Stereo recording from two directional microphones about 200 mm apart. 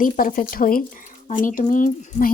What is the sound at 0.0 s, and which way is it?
Speech, 45° left (ahead or behind).